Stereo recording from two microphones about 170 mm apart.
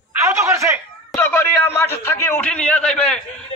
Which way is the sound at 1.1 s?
10° left (ahead or behind).